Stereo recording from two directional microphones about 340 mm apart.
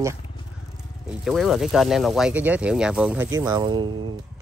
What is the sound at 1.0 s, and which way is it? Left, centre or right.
Speech, centre.